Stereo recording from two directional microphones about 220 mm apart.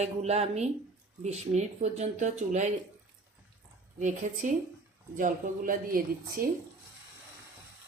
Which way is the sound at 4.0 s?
35° right (ahead or behind).